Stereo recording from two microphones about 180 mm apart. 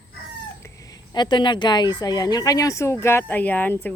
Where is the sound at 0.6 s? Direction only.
20° left (ahead or behind).